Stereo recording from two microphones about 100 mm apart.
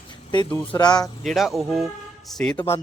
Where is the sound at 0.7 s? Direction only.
45° left (ahead or behind).